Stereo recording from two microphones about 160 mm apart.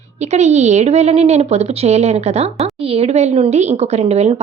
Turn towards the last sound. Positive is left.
turn(degrees=-40)  # may be behind; listen again after turning